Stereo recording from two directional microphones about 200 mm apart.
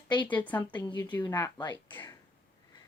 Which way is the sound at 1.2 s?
20° left (ahead or behind).